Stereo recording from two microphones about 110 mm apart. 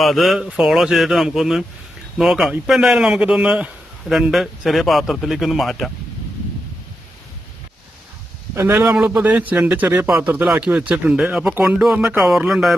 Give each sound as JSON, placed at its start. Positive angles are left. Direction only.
{"t": 0.0, "sound": "a man's voice", "side_deg": 0}
{"t": 8.5, "sound": "a man's voice", "side_deg": -20}